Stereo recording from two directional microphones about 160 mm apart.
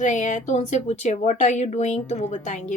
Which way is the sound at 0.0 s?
50° left (ahead or behind).